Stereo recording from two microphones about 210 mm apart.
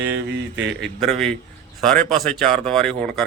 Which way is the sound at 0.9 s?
Centre (ahead or behind).